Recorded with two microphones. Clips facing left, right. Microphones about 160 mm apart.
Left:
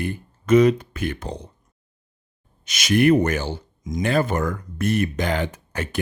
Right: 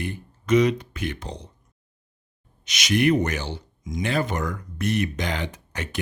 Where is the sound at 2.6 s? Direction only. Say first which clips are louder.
Left 4 dB; 50° left (ahead or behind).